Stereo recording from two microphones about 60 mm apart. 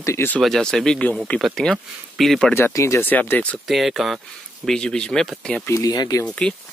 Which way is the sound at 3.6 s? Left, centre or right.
Centre.